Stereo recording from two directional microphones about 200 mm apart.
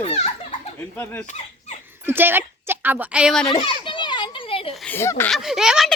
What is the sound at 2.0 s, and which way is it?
A woman's voice, 10° right (ahead or behind).